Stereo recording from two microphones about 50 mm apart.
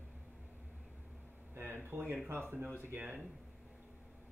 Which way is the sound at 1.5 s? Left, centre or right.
Right.